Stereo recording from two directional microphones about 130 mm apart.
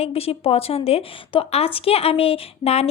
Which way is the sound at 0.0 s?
50° left (ahead or behind).